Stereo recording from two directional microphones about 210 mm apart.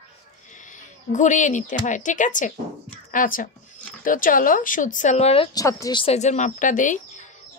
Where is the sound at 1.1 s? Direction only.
35° left (ahead or behind).